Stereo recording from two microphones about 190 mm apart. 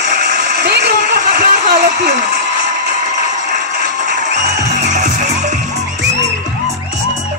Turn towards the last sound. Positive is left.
turn(degrees=-40)  # may be behind; listen again after turning